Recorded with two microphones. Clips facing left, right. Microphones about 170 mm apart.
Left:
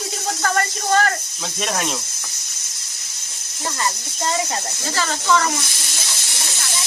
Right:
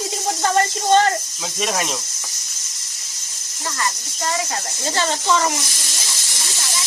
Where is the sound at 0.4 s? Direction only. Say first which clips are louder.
Right 3 dB; 25° right (ahead or behind).